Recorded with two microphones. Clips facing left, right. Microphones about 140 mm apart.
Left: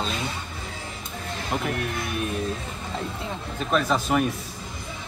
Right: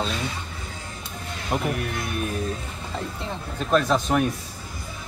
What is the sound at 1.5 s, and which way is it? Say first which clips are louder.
Speech: right 2 dB; 10° right (ahead or behind).